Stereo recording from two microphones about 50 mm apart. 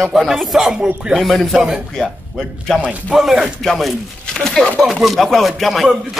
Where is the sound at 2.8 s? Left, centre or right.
Right.